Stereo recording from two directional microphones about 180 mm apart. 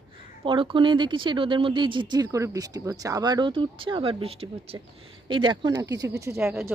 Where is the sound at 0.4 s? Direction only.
30° right (ahead or behind).